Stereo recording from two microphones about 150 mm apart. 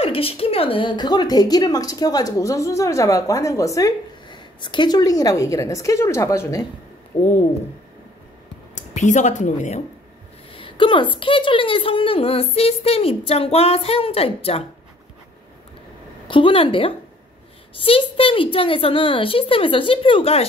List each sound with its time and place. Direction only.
0.0 s a woman's voice: 40° left (ahead or behind); by 6.6 s 20° left (ahead or behind)
8.7 s speech: 55° left (ahead or behind)
10.5 s a woman's voice: 35° left (ahead or behind)
16.3 s a woman's voice: 35° left (ahead or behind)